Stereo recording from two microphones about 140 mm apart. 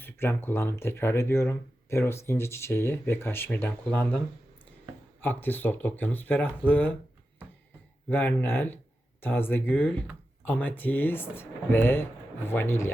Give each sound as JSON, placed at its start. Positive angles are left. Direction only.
{"t": 0.0, "sound": "speech", "side_deg": 15}
{"t": 5.2, "sound": "speech", "side_deg": 15}
{"t": 8.1, "sound": "speech", "side_deg": 15}